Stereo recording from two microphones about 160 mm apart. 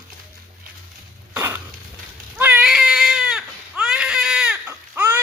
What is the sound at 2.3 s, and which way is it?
Baby cry, 10° right (ahead or behind).